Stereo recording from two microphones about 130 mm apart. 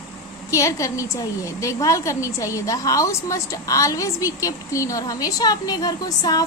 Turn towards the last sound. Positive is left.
turn(degrees=30)  # may be behind; listen again after turning